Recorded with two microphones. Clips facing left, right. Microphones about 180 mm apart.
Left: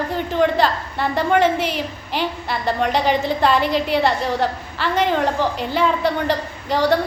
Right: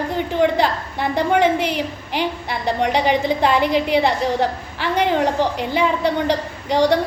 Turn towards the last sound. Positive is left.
turn(degrees=-15)  # may be behind; listen again after turning